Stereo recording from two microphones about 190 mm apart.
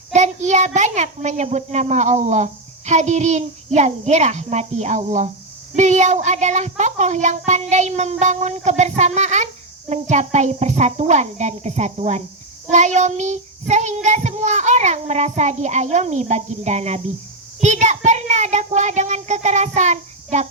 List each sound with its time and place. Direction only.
0.1 s a child's voice: 40° right (ahead or behind)
5.7 s child singing: 40° right (ahead or behind)